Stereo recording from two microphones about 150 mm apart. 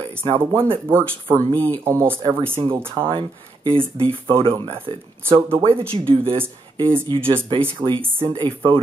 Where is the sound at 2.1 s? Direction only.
35° right (ahead or behind).